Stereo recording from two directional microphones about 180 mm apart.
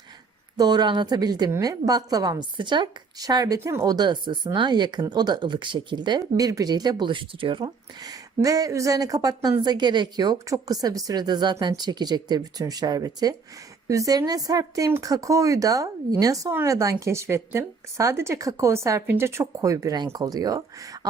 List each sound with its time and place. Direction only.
0.5 s a woman's voice: 20° right (ahead or behind)